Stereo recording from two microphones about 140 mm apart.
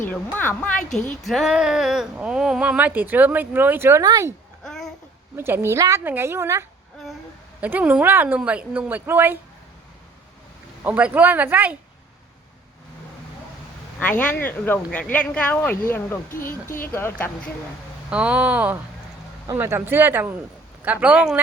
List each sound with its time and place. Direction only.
0.0 s speech: 15° left (ahead or behind); by 4.4 s 25° right (ahead or behind)
4.6 s babbling: 5° left (ahead or behind)
5.4 s speech: 20° right (ahead or behind)
10.8 s speech: 10° right (ahead or behind)
14.0 s speech: 10° left (ahead or behind)
16.3 s speech: 80° left
16.8 s speech: 15° left (ahead or behind)
18.1 s speech: 10° right (ahead or behind)